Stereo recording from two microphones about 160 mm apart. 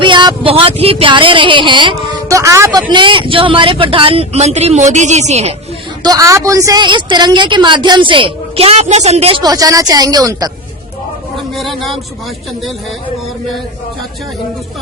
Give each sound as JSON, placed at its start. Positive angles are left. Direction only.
{"t": 0.0, "sound": "speech", "side_deg": -30}
{"t": 2.9, "sound": "speech", "side_deg": -30}
{"t": 6.0, "sound": "a woman's voice", "side_deg": -20}
{"t": 9.4, "sound": "a woman's voice", "side_deg": -25}
{"t": 11.3, "sound": "a sound", "side_deg": 0}